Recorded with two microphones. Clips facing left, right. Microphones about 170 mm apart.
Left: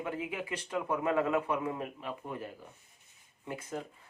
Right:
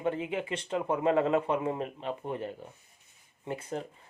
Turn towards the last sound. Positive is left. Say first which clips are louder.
# right 4 dB
turn(degrees=-25)  # may be behind; listen again after turning